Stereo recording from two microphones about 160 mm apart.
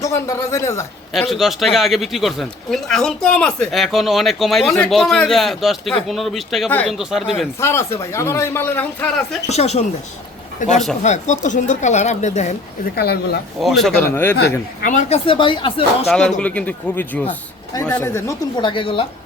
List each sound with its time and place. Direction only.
0.0 s a man's voice: 20° left (ahead or behind)
1.1 s speech: centre (ahead or behind)
7.6 s a man's voice: 15° left (ahead or behind)
9.5 s a woman's voice: 45° left (ahead or behind)
12.8 s speech: 80° left
13.6 s speech: centre (ahead or behind)
14.0 s a man's voice: 15° left (ahead or behind)
14.8 s a woman's voice: 50° left (ahead or behind)
15.3 s speech: 30° left (ahead or behind)
16.0 s a man's voice: 5° left (ahead or behind)
18.5 s speech: 30° left (ahead or behind)